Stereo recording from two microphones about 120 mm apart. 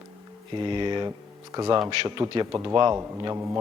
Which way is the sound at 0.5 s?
40° right (ahead or behind).